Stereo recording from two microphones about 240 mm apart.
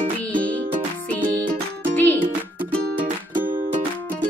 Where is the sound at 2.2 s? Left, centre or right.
Right.